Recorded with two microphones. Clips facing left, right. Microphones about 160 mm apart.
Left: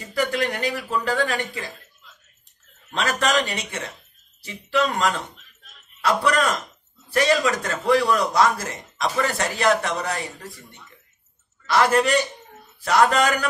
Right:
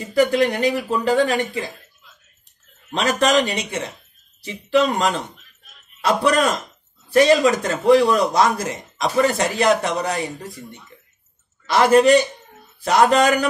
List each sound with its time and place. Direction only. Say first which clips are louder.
0.1 s a man's voice: right 7 dB; 20° right (ahead or behind)
2.9 s a man's voice: right 5 dB; 20° right (ahead or behind)